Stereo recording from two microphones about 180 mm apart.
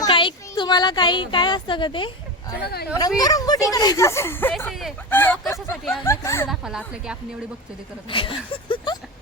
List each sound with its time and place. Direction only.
0.0 s speech: 30° left (ahead or behind)
2.6 s speech: 60° left (ahead or behind)
3.2 s speech: 20° left (ahead or behind)
6.5 s a woman's voice: 5° right (ahead or behind)
8.1 s speech: 30° left (ahead or behind)